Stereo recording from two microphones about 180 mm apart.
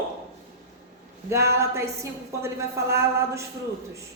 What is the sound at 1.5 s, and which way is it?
A woman's voice, 15° right (ahead or behind).